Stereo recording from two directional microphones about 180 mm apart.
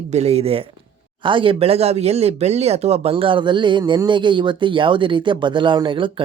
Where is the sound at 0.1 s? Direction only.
35° right (ahead or behind).